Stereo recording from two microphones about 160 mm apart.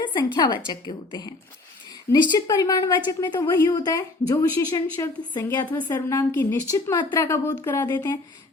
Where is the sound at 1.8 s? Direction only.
25° left (ahead or behind).